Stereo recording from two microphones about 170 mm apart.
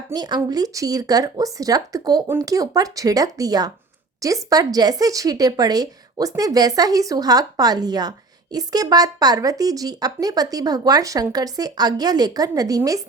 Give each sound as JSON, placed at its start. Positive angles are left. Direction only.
{"t": 0.1, "sound": "speech", "side_deg": -25}